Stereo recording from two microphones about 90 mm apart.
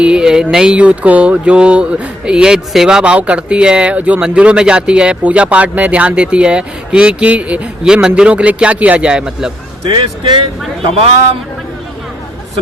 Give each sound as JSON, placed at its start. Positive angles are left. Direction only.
{"t": 0.0, "sound": "speech", "side_deg": -10}
{"t": 9.9, "sound": "speech", "side_deg": -60}